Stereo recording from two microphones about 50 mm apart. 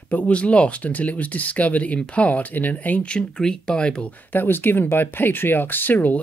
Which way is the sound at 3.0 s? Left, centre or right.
Centre.